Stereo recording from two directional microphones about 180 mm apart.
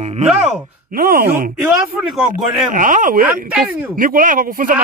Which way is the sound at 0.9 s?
55° right (ahead or behind).